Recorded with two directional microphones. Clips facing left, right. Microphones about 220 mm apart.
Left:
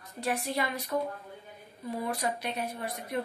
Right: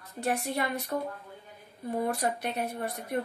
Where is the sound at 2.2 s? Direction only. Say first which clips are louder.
Right 2 dB; 55° right (ahead or behind).